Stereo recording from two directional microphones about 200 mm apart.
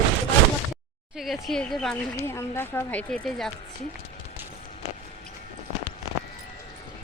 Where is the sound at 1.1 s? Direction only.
Centre (ahead or behind).